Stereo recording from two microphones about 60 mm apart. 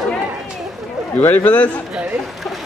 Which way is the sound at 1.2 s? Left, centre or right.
Left.